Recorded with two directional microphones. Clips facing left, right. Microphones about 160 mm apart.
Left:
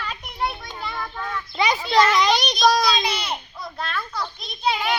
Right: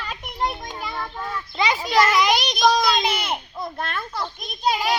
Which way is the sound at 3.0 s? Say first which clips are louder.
Right 2 dB; 50° right (ahead or behind).